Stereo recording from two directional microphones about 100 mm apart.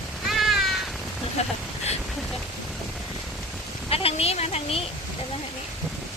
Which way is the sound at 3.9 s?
80° left.